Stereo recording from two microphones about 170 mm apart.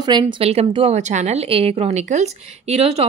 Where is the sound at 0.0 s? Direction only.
30° right (ahead or behind).